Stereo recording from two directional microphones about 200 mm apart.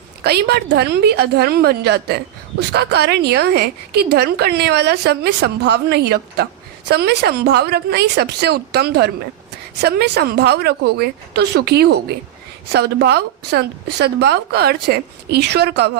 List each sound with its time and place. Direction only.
0.2 s a woman's voice: 55° right (ahead or behind)